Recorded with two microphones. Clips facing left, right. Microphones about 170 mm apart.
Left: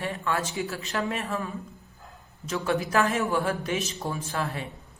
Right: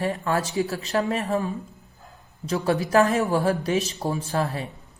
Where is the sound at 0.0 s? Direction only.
40° right (ahead or behind).